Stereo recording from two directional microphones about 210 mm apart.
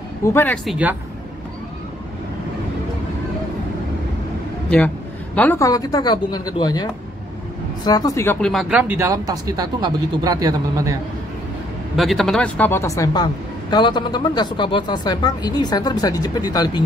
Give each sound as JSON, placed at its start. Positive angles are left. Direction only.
{"t": 0.2, "sound": "speech", "side_deg": 10}
{"t": 0.7, "sound": "speech", "side_deg": -5}
{"t": 4.6, "sound": "a woman's voice", "side_deg": 5}
{"t": 12.0, "sound": "a woman's voice", "side_deg": 0}